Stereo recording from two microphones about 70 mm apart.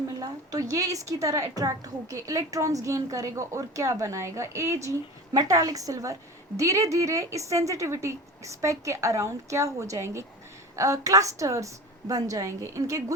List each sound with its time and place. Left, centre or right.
0.2 s a woman's voice: right